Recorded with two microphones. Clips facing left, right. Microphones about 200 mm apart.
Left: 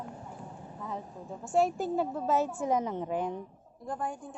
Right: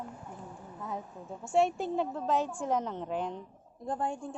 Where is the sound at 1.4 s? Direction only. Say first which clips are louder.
Even; centre (ahead or behind).